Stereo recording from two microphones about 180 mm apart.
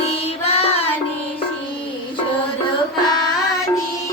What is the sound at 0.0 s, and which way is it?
Child singing, 35° left (ahead or behind).